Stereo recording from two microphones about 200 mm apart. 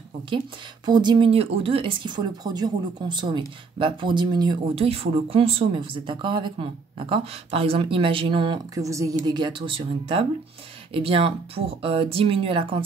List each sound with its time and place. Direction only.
0.8 s speech: 20° right (ahead or behind)